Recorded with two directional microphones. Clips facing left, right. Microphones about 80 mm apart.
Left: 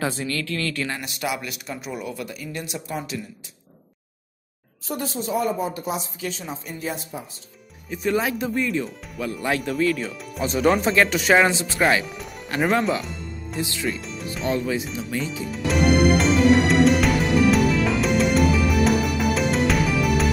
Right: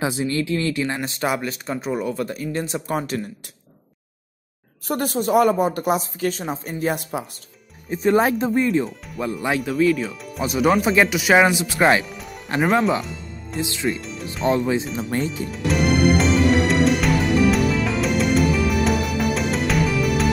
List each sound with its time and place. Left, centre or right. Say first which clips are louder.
0.0 s speech: right 4 dB; centre; by 3.2 s right
4.8 s speech: right 6 dB; right
7.0 s speech: right 6 dB; right
7.9 s speech: right 5 dB; right
8.8 s speech: right 3 dB; centre
10.4 s speech: right 1 dB; centre
12.0 s music: even; centre
12.5 s speech: right 2 dB; centre
13.6 s speech: right 2 dB; right
13.8 s speech: right 3 dB; centre
14.5 s speech: right 4 dB; right
15.0 s speech: right 4 dB; right
15.5 s music: left 1 dB; centre